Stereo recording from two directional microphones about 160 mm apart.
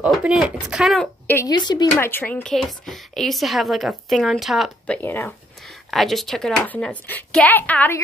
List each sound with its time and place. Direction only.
0.0 s a woman's voice: 5° right (ahead or behind)
1.2 s speech: 15° left (ahead or behind)
1.5 s speech: 25° left (ahead or behind)
2.0 s a woman's voice: 15° left (ahead or behind)
5.9 s a woman's voice: centre (ahead or behind)